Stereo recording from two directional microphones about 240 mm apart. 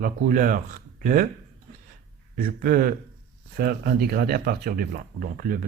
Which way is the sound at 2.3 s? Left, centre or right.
Right.